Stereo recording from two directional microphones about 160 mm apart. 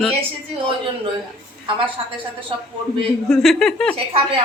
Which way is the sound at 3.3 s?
5° left (ahead or behind).